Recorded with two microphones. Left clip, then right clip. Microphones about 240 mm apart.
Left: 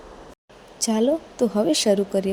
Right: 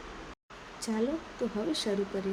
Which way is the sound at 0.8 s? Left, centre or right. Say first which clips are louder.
Left 11 dB; left.